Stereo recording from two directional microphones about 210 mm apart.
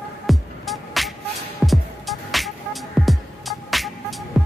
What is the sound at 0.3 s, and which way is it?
Music, centre (ahead or behind).